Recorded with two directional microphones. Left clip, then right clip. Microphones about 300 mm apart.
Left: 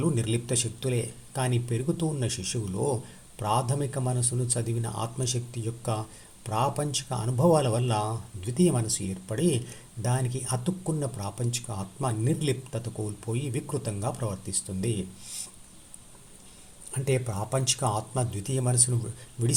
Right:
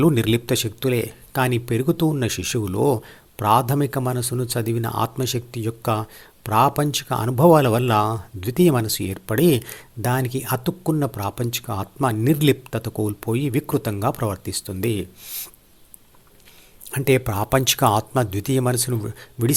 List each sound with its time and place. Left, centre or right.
0.0 s speech: right
16.9 s speech: right